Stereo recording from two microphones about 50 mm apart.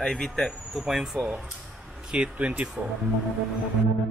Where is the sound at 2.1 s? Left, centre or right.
Right.